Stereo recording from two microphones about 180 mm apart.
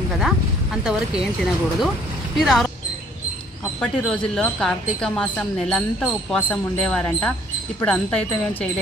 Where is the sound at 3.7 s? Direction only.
5° left (ahead or behind).